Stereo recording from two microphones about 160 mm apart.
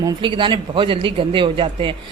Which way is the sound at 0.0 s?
30° right (ahead or behind).